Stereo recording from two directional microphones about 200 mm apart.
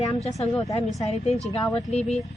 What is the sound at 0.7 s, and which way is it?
Speech, 30° left (ahead or behind).